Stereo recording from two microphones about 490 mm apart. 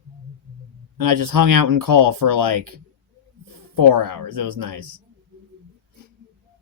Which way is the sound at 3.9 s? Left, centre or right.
Right.